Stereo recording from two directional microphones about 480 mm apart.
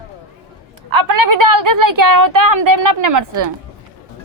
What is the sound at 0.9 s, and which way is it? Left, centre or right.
A woman's voice, right.